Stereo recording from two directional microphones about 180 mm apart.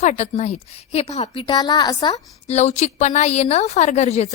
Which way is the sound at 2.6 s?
35° left (ahead or behind).